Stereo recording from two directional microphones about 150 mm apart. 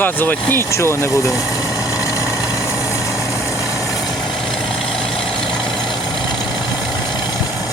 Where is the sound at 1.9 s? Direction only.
20° left (ahead or behind).